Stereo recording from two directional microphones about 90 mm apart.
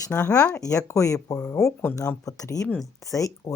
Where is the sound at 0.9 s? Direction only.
35° left (ahead or behind).